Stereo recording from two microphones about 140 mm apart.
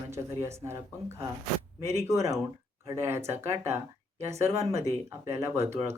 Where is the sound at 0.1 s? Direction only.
20° right (ahead or behind).